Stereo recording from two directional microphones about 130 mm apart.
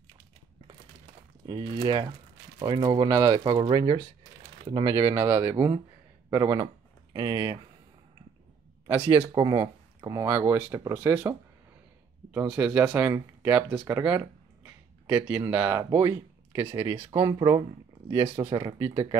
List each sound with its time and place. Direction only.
1.4 s speech: 30° right (ahead or behind)
8.8 s speech: 15° right (ahead or behind)
9.3 s speech: 35° right (ahead or behind)
10.2 s speech: 15° right (ahead or behind)
12.4 s speech: 10° right (ahead or behind)
14.0 s a sound: 10° right (ahead or behind)
15.8 s speech: 25° right (ahead or behind)